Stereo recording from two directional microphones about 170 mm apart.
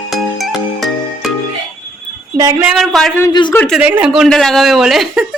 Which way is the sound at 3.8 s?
10° right (ahead or behind).